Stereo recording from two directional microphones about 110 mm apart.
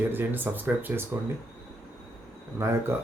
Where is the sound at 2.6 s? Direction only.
25° right (ahead or behind).